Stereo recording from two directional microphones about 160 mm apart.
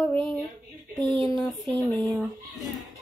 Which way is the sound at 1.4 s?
15° left (ahead or behind).